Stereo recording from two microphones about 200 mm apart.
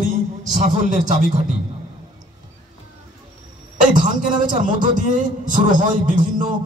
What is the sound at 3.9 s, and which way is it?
A man's voice, 40° right (ahead or behind).